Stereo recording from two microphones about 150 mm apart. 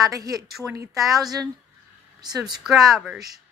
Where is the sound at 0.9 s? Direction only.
Centre (ahead or behind).